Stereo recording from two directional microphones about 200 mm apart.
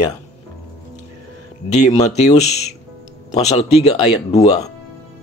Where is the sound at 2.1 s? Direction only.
35° left (ahead or behind).